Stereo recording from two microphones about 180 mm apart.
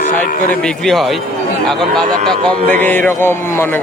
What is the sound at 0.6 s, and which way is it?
A man's voice, centre (ahead or behind).